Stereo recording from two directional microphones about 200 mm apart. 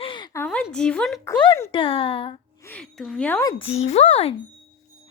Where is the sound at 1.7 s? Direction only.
25° left (ahead or behind).